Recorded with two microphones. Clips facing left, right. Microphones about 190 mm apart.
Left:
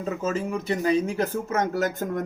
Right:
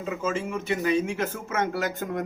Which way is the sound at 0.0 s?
40° left (ahead or behind).